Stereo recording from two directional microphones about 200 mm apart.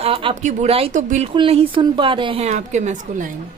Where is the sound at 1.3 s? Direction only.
25° right (ahead or behind).